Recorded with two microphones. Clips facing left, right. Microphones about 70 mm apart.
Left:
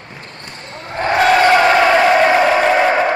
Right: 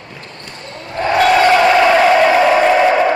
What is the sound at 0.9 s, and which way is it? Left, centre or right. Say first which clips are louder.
Crowd: right 1 dB; left.